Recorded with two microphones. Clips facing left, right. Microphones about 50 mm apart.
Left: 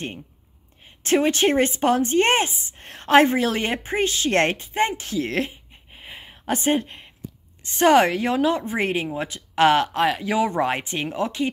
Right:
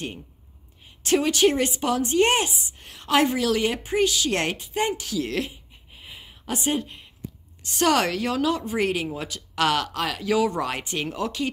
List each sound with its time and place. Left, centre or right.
0.8 s a woman's voice: left
7.6 s a woman's voice: left